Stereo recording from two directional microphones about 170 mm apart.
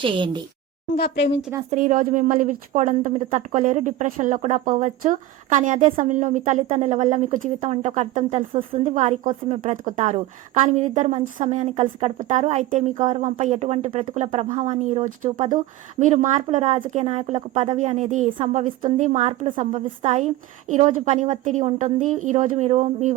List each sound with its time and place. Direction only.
0.0 s a woman's voice: 30° right (ahead or behind)
0.9 s speech: 80° left
1.7 s a woman's voice: 50° right (ahead or behind); by 14.3 s 35° right (ahead or behind)
14.3 s a woman's voice: 45° right (ahead or behind)